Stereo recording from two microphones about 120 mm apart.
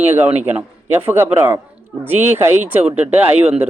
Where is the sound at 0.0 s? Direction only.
15° right (ahead or behind).